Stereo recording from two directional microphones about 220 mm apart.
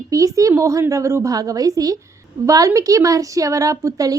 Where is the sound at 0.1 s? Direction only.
15° right (ahead or behind).